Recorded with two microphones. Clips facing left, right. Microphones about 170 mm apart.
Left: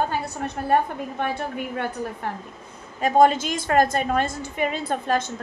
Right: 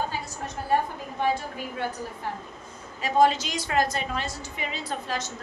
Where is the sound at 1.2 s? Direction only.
60° left (ahead or behind).